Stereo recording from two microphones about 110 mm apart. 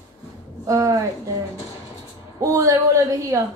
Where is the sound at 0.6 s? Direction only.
30° right (ahead or behind).